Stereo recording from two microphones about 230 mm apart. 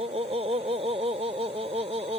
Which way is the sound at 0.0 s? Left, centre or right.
Right.